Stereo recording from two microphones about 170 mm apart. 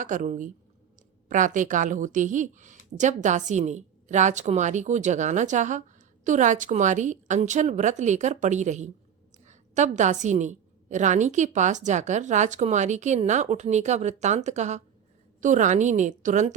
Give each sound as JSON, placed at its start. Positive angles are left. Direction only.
{"t": 0.0, "sound": "a woman's voice", "side_deg": -50}